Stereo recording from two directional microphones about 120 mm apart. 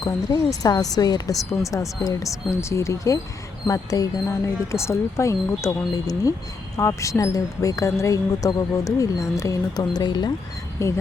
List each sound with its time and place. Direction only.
0.0 s speech: 30° left (ahead or behind)
10.8 s speech: 25° left (ahead or behind)